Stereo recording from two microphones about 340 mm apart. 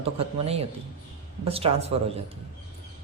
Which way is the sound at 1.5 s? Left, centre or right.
Centre.